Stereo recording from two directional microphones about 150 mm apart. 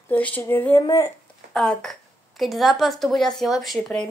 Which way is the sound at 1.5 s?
5° left (ahead or behind).